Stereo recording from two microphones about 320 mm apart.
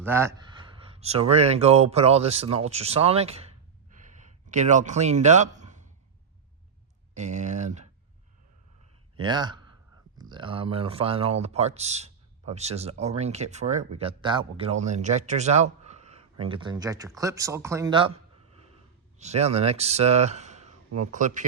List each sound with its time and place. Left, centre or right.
0.0 s a man's voice: centre
7.1 s a sound: right
9.1 s a man's voice: centre
19.2 s speech: centre